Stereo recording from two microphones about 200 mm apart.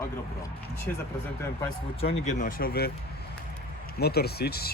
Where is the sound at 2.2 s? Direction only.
40° left (ahead or behind).